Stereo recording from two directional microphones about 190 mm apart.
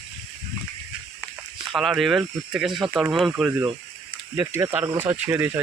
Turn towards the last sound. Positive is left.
turn(degrees=-10)  # may be behind; listen again after turning